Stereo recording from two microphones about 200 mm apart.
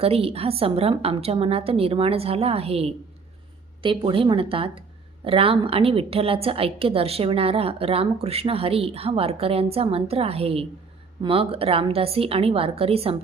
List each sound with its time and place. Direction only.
0.0 s a woman's voice: 30° right (ahead or behind)